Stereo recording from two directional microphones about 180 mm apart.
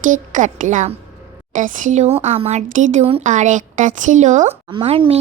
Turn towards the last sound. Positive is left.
turn(degrees=-30)  # may be behind; listen again after turning